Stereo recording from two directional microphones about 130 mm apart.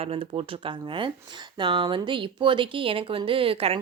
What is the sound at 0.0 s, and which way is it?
Speech, 45° right (ahead or behind).